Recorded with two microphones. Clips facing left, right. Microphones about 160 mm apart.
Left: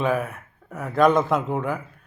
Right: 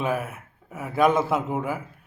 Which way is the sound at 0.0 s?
5° right (ahead or behind).